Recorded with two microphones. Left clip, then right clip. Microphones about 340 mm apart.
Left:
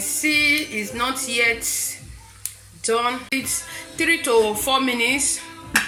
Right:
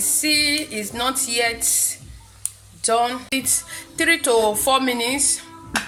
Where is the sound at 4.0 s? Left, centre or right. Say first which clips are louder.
Right 1 dB; right.